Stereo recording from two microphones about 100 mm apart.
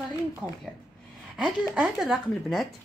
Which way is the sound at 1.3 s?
10° right (ahead or behind).